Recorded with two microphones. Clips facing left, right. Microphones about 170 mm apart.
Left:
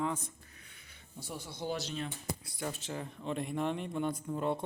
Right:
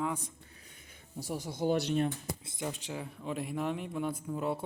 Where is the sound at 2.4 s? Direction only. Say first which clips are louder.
Right 1 dB; 20° right (ahead or behind); by 4.6 s 5° right (ahead or behind).